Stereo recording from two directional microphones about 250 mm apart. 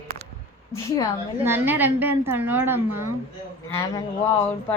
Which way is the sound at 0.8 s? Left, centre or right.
Centre.